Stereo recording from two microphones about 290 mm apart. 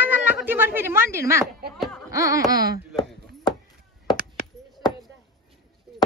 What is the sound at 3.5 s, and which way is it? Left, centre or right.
Chop, centre.